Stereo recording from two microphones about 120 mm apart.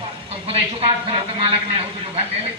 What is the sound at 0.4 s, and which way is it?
Speech, 50° right (ahead or behind).